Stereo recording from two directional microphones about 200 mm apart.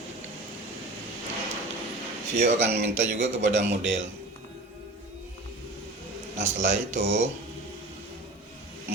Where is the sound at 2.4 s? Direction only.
35° right (ahead or behind).